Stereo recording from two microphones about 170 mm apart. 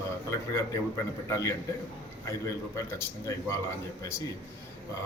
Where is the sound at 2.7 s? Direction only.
15° left (ahead or behind).